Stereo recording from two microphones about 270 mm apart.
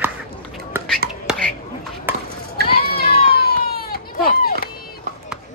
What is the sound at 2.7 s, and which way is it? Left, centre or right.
Run, left.